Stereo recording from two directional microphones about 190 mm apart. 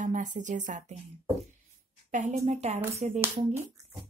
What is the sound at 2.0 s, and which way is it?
Speech, 40° right (ahead or behind).